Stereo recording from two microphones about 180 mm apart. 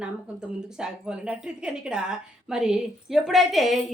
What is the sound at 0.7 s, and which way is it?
A woman's voice, 5° right (ahead or behind).